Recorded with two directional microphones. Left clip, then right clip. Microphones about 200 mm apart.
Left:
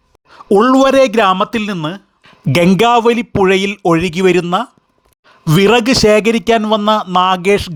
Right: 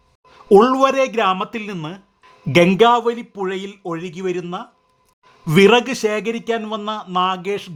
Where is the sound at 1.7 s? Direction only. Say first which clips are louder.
Left 9 dB; 30° left (ahead or behind).